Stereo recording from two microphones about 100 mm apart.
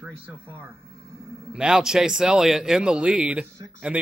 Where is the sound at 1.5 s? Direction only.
5° right (ahead or behind).